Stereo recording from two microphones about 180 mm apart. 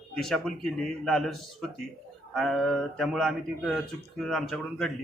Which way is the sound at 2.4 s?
Centre (ahead or behind).